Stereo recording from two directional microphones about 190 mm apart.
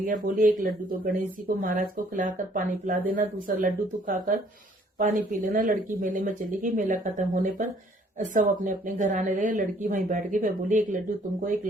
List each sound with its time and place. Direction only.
0.1 s a woman's voice: 45° right (ahead or behind)